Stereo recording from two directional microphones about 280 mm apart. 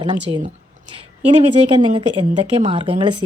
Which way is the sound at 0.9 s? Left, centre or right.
Centre.